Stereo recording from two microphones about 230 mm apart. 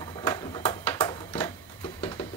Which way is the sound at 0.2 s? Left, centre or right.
Centre.